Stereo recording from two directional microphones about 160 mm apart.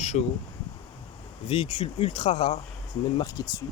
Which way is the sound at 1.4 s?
35° left (ahead or behind).